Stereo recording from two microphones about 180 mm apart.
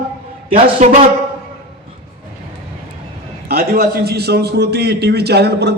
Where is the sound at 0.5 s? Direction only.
40° right (ahead or behind).